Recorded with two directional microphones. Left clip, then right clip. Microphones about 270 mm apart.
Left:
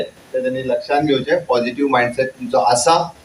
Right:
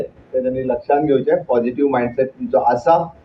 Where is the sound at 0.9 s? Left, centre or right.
Left.